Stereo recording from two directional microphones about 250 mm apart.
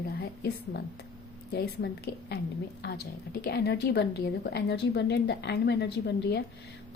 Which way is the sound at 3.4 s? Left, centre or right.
Left.